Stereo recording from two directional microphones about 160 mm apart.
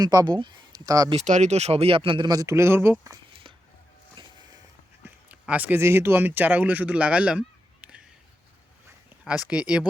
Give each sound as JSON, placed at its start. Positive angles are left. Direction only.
{"t": 0.0, "sound": "speech", "side_deg": -25}
{"t": 1.1, "sound": "speech", "side_deg": -45}
{"t": 5.0, "sound": "speech", "side_deg": -10}
{"t": 9.2, "sound": "speech", "side_deg": -5}